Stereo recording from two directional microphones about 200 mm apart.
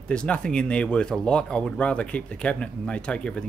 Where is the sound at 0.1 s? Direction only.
5° left (ahead or behind).